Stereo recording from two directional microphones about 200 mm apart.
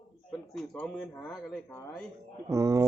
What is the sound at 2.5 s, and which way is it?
Speech, 15° right (ahead or behind).